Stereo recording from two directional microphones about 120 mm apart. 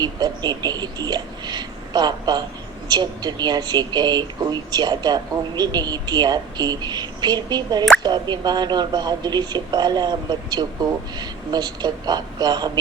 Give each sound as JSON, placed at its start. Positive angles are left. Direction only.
{"t": 0.0, "sound": "speech", "side_deg": -35}